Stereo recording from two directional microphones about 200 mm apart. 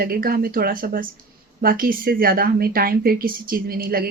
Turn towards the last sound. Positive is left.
turn(degrees=-50)  # may be behind; listen again after turning